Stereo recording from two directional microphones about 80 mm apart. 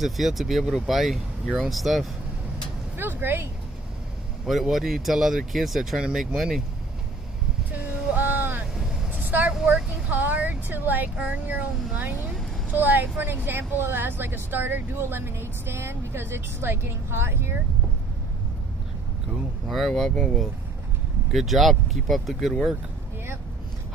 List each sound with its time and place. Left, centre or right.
0.0 s speech: centre
3.0 s speech: right
4.5 s speech: centre
7.7 s a sound: centre
9.1 s vehicle: right
9.6 s speech: centre
10.0 s speech: centre
19.7 s speech: centre